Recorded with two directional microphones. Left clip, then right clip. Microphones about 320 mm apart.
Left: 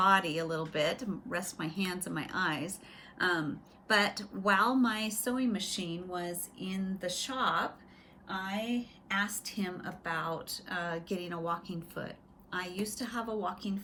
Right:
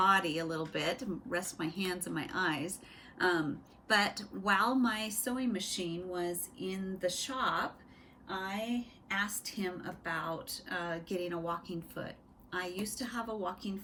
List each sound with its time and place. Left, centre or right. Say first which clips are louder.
0.0 s a woman's voice: left 2 dB; centre
8.4 s a woman's voice: left 2 dB; right
9.0 s a woman's voice: left 2 dB; centre